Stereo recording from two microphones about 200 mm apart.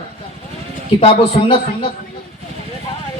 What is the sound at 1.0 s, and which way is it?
Speech, 30° left (ahead or behind).